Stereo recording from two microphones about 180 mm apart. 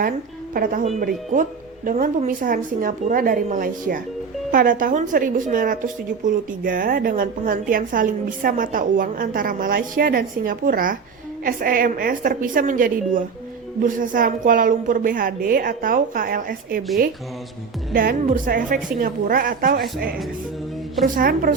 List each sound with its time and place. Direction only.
0.5 s a woman's voice: 50° right (ahead or behind)
17.9 s a woman's voice: 50° right (ahead or behind)
21.2 s a woman's voice: 55° right (ahead or behind)